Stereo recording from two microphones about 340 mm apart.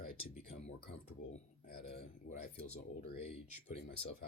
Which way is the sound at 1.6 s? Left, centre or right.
Left.